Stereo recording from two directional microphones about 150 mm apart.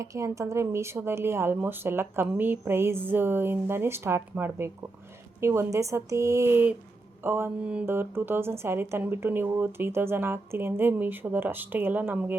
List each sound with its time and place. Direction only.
0.0 s a woman's voice: 20° right (ahead or behind)